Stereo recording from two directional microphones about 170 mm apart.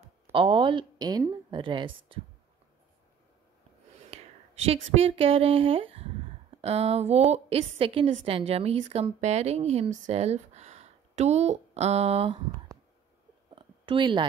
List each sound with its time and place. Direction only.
0.3 s a woman's voice: 30° right (ahead or behind)
4.6 s speech: 35° right (ahead or behind)
13.6 s a sound: 30° right (ahead or behind)